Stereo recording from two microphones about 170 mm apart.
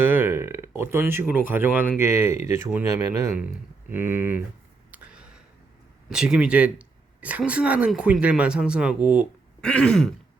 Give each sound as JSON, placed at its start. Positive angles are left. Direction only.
{"t": 0.0, "sound": "speech", "side_deg": -10}
{"t": 4.9, "sound": "a sound", "side_deg": -5}
{"t": 6.1, "sound": "speech", "side_deg": -5}
{"t": 9.6, "sound": "throat clearing", "side_deg": 5}